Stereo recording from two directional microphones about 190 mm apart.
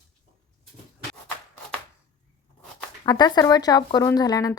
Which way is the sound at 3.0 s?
20° left (ahead or behind).